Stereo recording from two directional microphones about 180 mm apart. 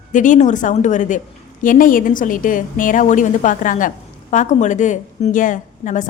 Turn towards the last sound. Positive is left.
turn(degrees=45)  # may be behind; listen again after turning